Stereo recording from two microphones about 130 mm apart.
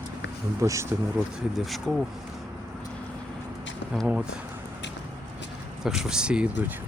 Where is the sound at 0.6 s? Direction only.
25° right (ahead or behind).